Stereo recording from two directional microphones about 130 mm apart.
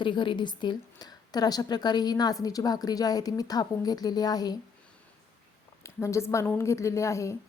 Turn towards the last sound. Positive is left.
turn(degrees=25)  # may be behind; listen again after turning